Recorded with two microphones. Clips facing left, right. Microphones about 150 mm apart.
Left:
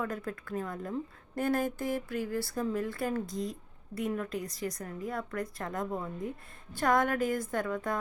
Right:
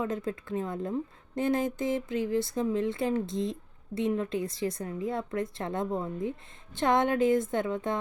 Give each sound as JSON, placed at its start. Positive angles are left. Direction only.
{"t": 0.0, "sound": "a woman's voice", "side_deg": -20}